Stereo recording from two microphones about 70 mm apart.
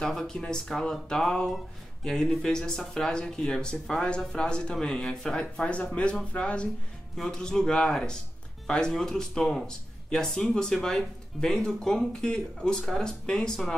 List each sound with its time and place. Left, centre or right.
0.0 s speech: centre